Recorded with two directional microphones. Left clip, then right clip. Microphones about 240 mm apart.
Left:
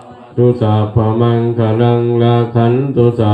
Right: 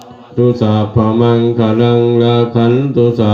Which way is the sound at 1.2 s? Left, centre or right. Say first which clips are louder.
Right 4 dB; right.